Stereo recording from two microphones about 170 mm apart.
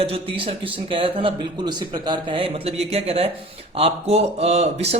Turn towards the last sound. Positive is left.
turn(degrees=-40)  # may be behind; listen again after turning